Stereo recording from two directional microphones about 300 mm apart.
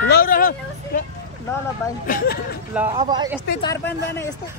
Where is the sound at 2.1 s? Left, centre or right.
Left.